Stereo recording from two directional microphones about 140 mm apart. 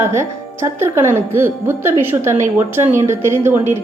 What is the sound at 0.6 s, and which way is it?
A woman's voice, 20° right (ahead or behind).